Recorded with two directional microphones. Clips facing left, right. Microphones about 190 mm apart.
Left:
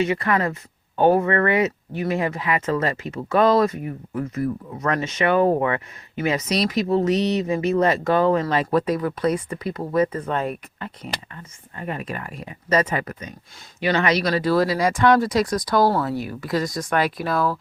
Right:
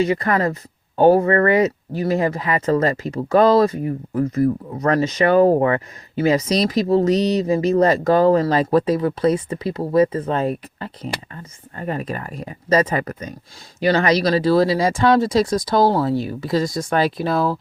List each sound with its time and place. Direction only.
0.0 s speech: 35° right (ahead or behind)